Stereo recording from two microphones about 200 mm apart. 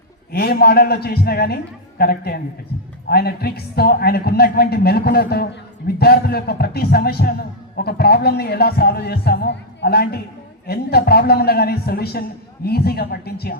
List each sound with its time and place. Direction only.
0.3 s a man's voice: 50° left (ahead or behind)